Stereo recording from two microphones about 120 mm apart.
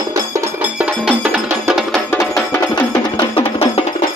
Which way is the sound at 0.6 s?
10° right (ahead or behind).